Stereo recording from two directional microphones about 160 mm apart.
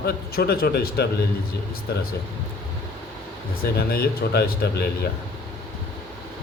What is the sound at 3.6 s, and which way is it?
A man's voice, 70° left (ahead or behind).